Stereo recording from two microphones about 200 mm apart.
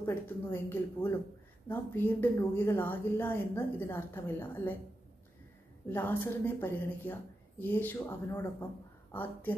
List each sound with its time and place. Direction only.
0.0 s speech: 10° left (ahead or behind)
5.9 s speech: 10° left (ahead or behind)